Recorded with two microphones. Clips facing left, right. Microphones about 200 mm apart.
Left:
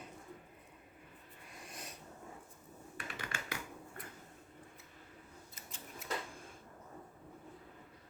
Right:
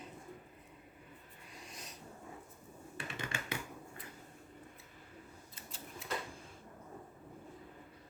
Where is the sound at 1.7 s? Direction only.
55° left (ahead or behind).